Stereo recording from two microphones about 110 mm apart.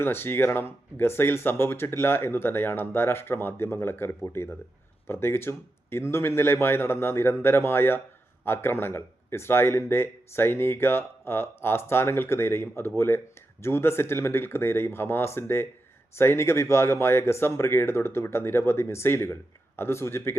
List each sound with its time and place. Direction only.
0.0 s speech: 20° left (ahead or behind)